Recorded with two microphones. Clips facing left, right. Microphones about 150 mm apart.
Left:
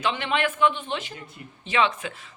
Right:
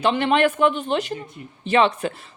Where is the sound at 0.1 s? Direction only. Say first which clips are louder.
Right 9 dB; 45° right (ahead or behind).